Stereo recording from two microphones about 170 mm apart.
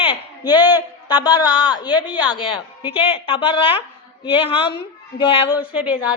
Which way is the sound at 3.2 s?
30° left (ahead or behind).